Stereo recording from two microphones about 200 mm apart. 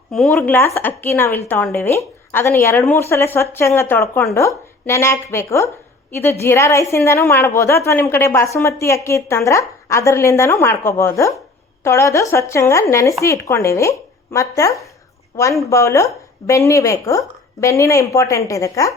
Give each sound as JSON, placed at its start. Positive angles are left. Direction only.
{"t": 0.1, "sound": "a woman's voice", "side_deg": 0}